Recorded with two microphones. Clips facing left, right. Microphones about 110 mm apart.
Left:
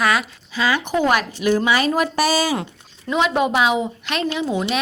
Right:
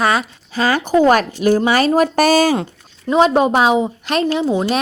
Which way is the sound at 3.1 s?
35° right (ahead or behind).